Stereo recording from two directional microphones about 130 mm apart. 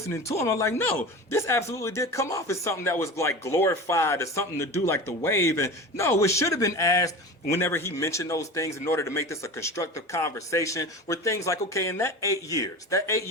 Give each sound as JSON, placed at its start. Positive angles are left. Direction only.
{"t": 0.3, "sound": "speech", "side_deg": 20}